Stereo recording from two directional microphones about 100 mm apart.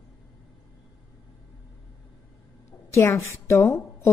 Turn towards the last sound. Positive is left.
turn(degrees=25)  # may be behind; listen again after turning